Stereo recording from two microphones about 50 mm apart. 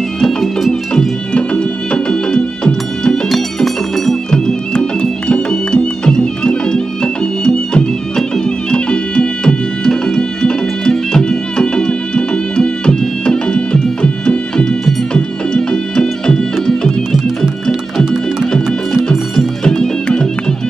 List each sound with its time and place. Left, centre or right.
0.2 s music: centre
1.3 s music: centre
3.3 s music: centre
19.0 s music: centre